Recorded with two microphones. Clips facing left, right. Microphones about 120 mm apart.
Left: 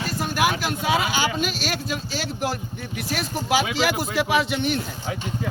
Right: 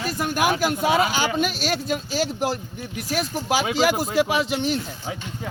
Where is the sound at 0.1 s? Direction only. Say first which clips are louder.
Right 1 dB; 45° right (ahead or behind).